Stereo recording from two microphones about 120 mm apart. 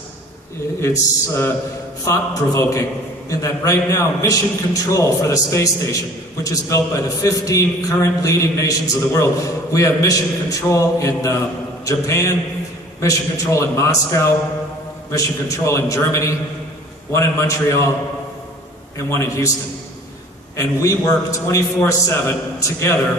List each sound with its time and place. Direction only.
0.8 s a man's voice: 25° left (ahead or behind)
18.9 s a man's voice: 20° left (ahead or behind)
20.6 s a man's voice: 25° left (ahead or behind)